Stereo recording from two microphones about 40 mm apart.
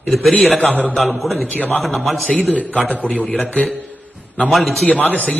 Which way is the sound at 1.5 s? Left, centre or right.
Left.